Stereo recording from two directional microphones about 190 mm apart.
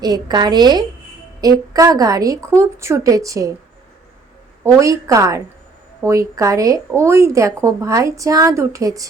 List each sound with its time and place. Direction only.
0.0 s a woman's voice: 20° right (ahead or behind)
4.6 s a woman's voice: 15° right (ahead or behind)